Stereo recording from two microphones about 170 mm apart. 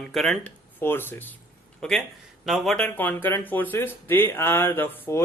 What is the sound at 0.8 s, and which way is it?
Speech, 10° left (ahead or behind).